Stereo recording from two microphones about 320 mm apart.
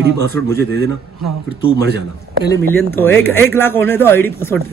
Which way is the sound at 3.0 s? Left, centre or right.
Centre.